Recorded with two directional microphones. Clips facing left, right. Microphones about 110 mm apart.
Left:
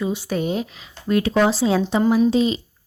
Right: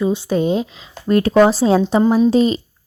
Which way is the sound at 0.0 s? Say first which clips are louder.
Right 6 dB; 30° right (ahead or behind).